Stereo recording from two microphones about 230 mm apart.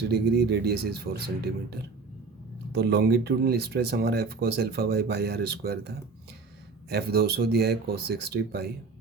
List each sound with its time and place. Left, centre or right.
0.0 s speech: right